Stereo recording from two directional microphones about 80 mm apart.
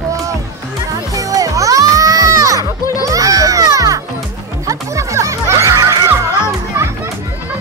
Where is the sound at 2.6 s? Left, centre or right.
Left.